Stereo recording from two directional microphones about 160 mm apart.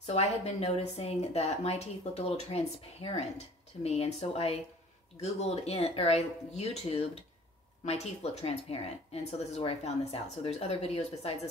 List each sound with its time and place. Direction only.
0.0 s speech: 45° left (ahead or behind)